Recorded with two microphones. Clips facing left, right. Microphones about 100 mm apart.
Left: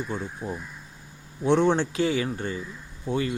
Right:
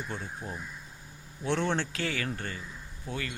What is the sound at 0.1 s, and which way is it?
Speech, 15° left (ahead or behind).